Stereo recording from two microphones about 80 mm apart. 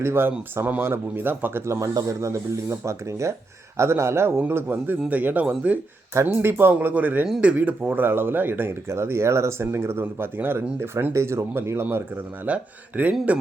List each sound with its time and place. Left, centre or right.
0.0 s speech: right
1.6 s speech: right
12.5 s speech: centre